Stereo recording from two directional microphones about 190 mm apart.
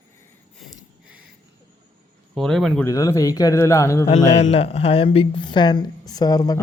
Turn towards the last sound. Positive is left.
turn(degrees=20)  # may be behind; listen again after turning